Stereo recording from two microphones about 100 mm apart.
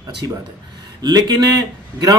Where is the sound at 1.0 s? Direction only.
45° right (ahead or behind).